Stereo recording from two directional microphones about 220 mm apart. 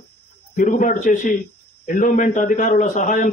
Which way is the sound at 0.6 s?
35° left (ahead or behind).